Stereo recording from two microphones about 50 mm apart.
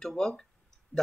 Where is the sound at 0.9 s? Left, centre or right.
Right.